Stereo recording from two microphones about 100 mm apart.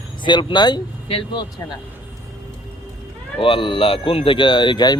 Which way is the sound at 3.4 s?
60° left (ahead or behind).